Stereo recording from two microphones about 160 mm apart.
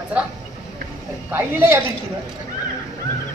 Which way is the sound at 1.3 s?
15° right (ahead or behind).